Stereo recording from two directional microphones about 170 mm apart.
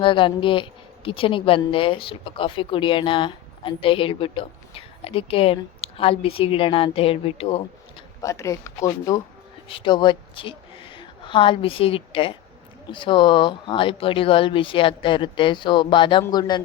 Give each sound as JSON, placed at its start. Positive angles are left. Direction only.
{"t": 0.0, "sound": "speech", "side_deg": 30}
{"t": 8.2, "sound": "speech", "side_deg": 20}
{"t": 9.6, "sound": "speech", "side_deg": 30}